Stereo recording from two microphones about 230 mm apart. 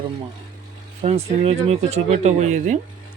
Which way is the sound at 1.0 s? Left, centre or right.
Right.